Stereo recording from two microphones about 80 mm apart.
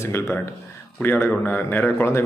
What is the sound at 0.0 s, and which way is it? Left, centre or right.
A man's voice, left.